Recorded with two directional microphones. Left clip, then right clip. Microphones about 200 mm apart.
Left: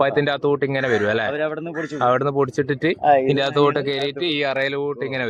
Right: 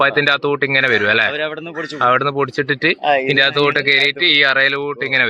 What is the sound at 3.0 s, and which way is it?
Speech, 45° left (ahead or behind).